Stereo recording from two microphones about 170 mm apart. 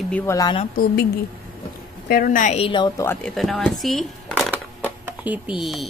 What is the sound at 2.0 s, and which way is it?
Speech, 55° left (ahead or behind).